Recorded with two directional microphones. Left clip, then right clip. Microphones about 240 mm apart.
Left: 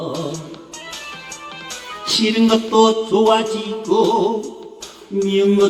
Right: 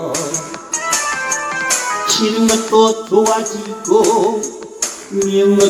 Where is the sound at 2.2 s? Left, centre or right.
Left.